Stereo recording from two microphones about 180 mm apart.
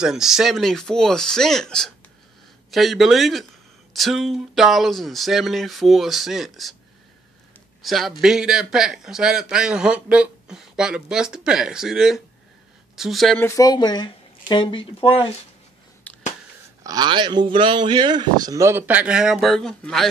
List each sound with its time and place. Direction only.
0.0 s a man's voice: 5° right (ahead or behind)
7.8 s a man's voice: centre (ahead or behind)
13.4 s speech: 20° left (ahead or behind)
16.1 s a sound: 10° left (ahead or behind)
16.8 s speech: 25° right (ahead or behind); by 20.1 s 5° left (ahead or behind)